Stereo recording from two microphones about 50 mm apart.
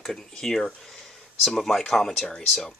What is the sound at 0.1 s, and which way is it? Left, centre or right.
Speech, centre.